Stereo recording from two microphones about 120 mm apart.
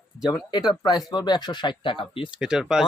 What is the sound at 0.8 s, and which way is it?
Speech, 35° left (ahead or behind).